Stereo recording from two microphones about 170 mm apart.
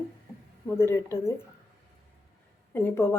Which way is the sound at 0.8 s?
15° left (ahead or behind).